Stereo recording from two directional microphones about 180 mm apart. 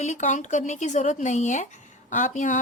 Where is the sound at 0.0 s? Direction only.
40° left (ahead or behind).